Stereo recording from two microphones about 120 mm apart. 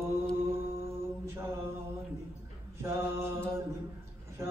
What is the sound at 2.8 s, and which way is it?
Mantra, 25° right (ahead or behind).